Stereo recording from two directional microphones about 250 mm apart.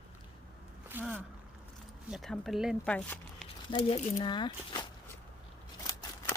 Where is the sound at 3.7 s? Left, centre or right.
Centre.